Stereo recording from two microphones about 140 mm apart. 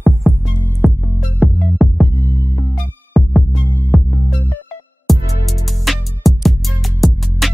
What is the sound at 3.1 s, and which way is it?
Music, centre (ahead or behind).